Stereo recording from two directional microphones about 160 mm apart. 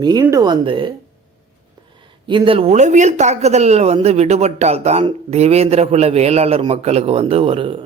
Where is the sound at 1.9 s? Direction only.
30° right (ahead or behind).